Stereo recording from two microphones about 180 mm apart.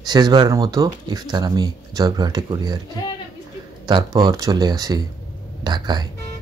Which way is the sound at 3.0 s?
25° left (ahead or behind).